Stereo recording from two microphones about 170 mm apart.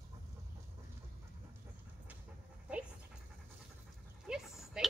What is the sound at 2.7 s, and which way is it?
Dog, 5° right (ahead or behind).